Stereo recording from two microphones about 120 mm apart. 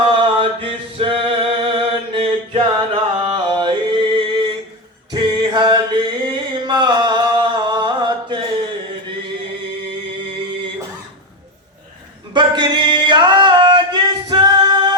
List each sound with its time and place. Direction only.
0.1 s a sound: 50° right (ahead or behind)
5.1 s music: 40° right (ahead or behind)
12.3 s male singing: 40° right (ahead or behind)